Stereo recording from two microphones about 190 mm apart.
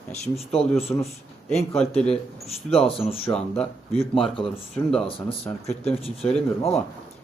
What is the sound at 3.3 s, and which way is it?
Speech, 5° left (ahead or behind).